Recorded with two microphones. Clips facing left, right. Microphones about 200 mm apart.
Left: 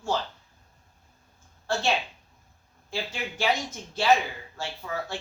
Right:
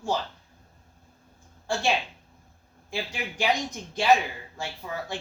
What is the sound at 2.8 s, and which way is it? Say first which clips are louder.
Speech: even; 15° right (ahead or behind).